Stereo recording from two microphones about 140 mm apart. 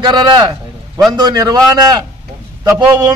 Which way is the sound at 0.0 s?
30° right (ahead or behind).